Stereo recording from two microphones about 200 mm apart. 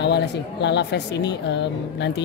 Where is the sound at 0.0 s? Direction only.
55° left (ahead or behind).